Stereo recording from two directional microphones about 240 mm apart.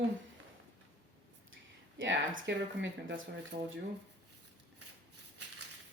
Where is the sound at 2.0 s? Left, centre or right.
Right.